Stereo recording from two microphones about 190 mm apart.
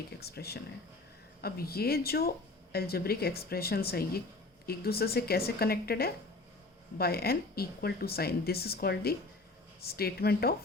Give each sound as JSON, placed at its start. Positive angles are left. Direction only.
{"t": 0.2, "sound": "speech", "side_deg": 55}